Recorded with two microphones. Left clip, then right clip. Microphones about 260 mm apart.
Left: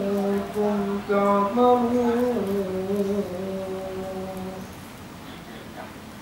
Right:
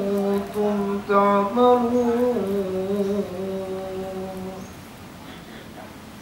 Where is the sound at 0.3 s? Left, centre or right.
Centre.